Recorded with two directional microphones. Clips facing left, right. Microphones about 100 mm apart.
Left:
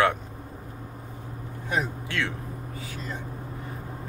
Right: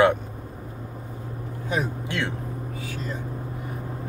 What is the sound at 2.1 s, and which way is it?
Speech, 20° right (ahead or behind).